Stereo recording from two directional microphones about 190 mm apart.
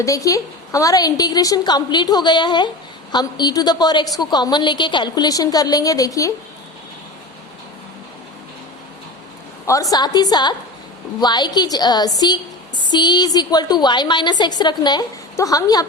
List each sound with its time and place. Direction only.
0.0 s a woman's voice: 15° left (ahead or behind)
9.9 s a woman's voice: 20° left (ahead or behind)